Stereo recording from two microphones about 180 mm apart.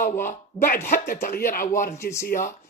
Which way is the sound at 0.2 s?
45° left (ahead or behind).